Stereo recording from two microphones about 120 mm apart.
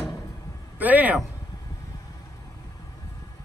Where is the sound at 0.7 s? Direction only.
15° right (ahead or behind).